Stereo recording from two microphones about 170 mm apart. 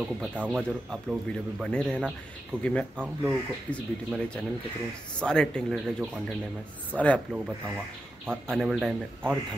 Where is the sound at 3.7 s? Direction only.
5° left (ahead or behind).